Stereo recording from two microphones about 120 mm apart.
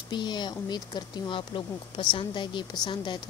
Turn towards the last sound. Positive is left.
turn(degrees=40)  # may be behind; listen again after turning